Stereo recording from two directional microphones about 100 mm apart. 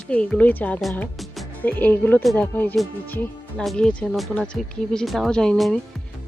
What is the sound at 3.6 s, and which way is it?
Speech, 5° left (ahead or behind).